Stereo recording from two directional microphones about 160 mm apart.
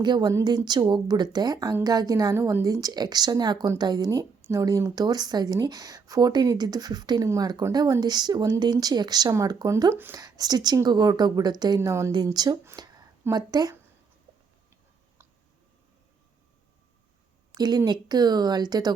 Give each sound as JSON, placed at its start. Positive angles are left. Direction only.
{"t": 0.0, "sound": "speech", "side_deg": -25}
{"t": 17.5, "sound": "speech", "side_deg": -25}